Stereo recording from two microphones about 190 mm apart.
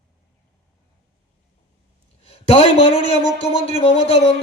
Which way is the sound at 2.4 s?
30° left (ahead or behind).